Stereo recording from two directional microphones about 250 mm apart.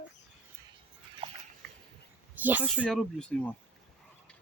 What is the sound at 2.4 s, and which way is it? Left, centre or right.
Speech, centre.